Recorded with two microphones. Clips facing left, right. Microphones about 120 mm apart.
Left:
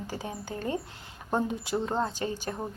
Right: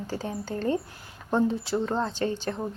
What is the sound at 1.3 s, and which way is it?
Speech, 15° left (ahead or behind).